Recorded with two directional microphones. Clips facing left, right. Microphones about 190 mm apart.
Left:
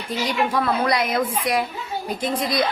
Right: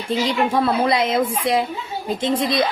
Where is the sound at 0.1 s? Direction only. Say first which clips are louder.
Right 3 dB; 25° right (ahead or behind).